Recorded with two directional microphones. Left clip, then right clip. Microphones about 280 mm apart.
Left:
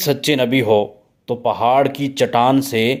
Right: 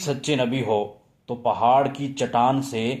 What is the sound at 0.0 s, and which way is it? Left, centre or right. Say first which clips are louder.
Speech: left 7 dB; left.